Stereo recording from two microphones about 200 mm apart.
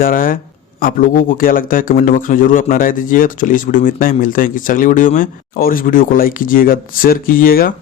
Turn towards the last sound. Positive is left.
turn(degrees=45)  # may be behind; listen again after turning